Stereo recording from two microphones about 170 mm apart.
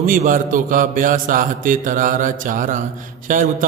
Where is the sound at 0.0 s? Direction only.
50° right (ahead or behind).